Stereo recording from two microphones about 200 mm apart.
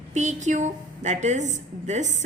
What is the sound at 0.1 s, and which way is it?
A woman's voice, 35° right (ahead or behind).